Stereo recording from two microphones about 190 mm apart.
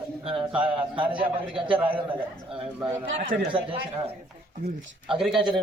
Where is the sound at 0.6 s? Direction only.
25° right (ahead or behind).